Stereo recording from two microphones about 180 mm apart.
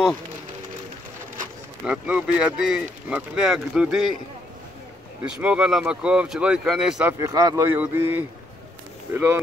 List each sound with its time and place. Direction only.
1.9 s speech: 5° right (ahead or behind)
5.2 s speech: 5° right (ahead or behind)
7.2 s a man's voice: 20° right (ahead or behind)